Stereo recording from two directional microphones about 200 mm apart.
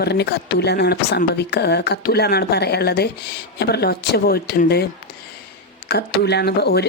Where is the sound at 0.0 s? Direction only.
55° left (ahead or behind).